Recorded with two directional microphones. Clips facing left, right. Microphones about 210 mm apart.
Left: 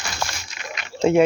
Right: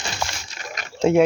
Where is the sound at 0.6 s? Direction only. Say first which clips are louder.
Even; 40° right (ahead or behind).